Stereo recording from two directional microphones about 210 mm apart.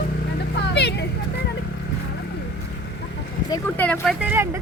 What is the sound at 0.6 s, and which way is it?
Vehicle, 55° left (ahead or behind).